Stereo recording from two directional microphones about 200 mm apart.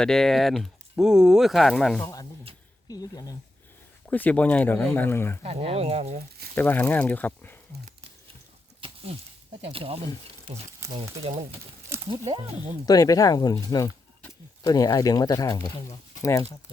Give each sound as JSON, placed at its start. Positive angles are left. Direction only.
{"t": 0.0, "sound": "speech", "side_deg": 5}
{"t": 2.9, "sound": "speech", "side_deg": 20}
{"t": 4.1, "sound": "speech", "side_deg": 10}
{"t": 5.4, "sound": "speech", "side_deg": -30}
{"t": 6.6, "sound": "speech", "side_deg": 10}
{"t": 8.8, "sound": "a sound", "side_deg": -25}
{"t": 9.7, "sound": "speech", "side_deg": -30}
{"t": 11.9, "sound": "speech", "side_deg": -20}
{"t": 12.8, "sound": "speech", "side_deg": 20}